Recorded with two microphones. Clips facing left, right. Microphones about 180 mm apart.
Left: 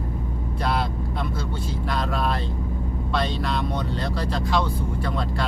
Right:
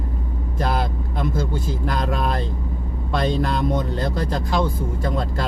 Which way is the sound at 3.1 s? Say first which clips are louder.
Right 5 dB; 45° right (ahead or behind).